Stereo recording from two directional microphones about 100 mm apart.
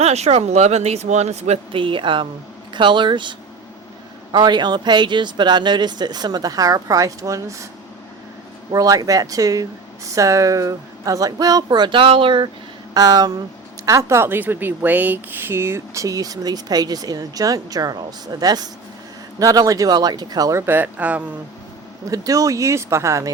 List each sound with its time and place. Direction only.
0.0 s speech: 90° right; by 7.7 s 30° right (ahead or behind)
8.7 s speech: 35° right (ahead or behind); by 12.5 s 60° right (ahead or behind)
12.9 s speech: 40° right (ahead or behind)
20.6 s speech: 20° right (ahead or behind)
22.1 s speech: 35° right (ahead or behind)